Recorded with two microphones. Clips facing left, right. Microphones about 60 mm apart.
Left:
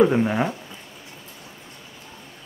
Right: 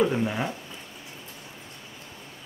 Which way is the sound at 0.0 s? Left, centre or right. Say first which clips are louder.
Left 6 dB; left.